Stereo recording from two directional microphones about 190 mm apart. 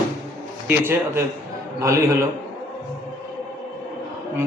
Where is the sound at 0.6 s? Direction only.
10° right (ahead or behind).